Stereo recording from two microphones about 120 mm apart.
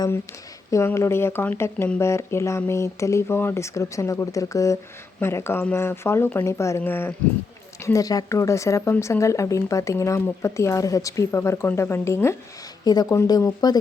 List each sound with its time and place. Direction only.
0.7 s speech: 25° left (ahead or behind)
12.8 s speech: 35° left (ahead or behind)